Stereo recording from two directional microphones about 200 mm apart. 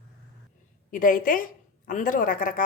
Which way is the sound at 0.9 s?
40° left (ahead or behind).